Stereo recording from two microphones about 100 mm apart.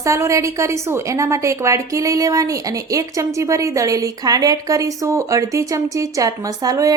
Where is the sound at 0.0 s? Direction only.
30° right (ahead or behind).